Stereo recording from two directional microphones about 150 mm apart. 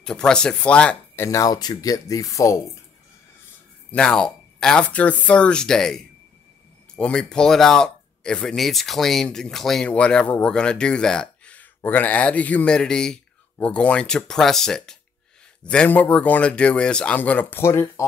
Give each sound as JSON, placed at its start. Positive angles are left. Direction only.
{"t": 0.0, "sound": "speech", "side_deg": 5}
{"t": 3.9, "sound": "speech", "side_deg": 5}